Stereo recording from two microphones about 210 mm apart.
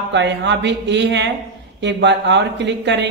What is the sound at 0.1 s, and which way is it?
Speech, 55° right (ahead or behind).